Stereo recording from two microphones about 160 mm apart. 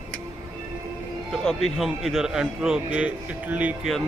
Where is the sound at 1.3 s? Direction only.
Centre (ahead or behind).